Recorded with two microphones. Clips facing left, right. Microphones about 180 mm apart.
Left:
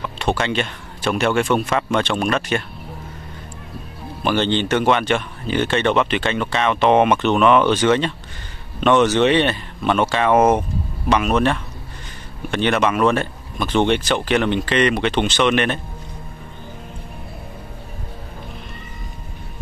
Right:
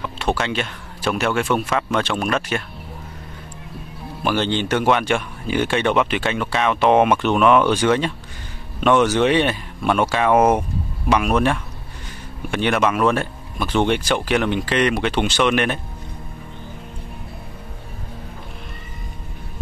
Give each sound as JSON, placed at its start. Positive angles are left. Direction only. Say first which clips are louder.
{"t": 0.2, "sound": "speech", "louder": "left 2 dB", "side_deg": -5}
{"t": 4.2, "sound": "speech", "louder": "left 2 dB", "side_deg": -5}